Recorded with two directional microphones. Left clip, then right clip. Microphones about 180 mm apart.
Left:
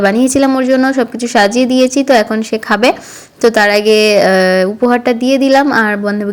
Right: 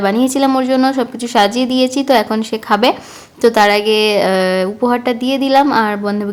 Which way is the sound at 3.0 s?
5° left (ahead or behind).